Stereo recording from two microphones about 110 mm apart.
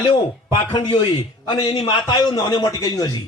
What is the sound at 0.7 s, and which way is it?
A man's voice, 50° left (ahead or behind).